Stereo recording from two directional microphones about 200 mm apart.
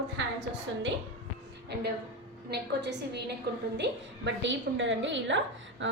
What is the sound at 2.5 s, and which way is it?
A woman's voice, 55° right (ahead or behind).